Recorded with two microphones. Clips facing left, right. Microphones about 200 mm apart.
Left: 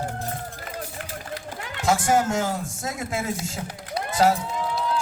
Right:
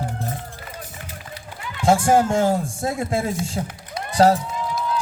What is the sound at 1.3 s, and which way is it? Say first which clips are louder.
Run: left 4 dB; 45° left (ahead or behind).